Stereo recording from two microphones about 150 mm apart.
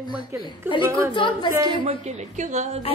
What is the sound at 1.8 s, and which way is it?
A woman's voice, 45° right (ahead or behind).